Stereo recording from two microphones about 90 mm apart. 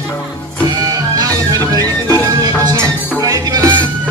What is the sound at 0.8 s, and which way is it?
Music, 40° right (ahead or behind).